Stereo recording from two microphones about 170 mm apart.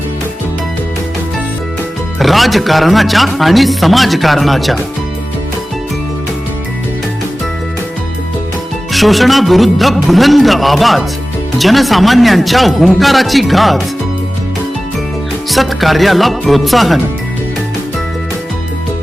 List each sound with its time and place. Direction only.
2.1 s speech: centre (ahead or behind)
8.9 s speech: centre (ahead or behind)
15.4 s speech: centre (ahead or behind)